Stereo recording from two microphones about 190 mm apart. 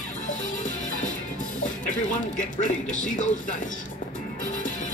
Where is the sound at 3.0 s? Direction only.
40° left (ahead or behind).